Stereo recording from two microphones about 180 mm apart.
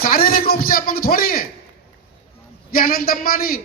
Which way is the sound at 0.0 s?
55° left (ahead or behind).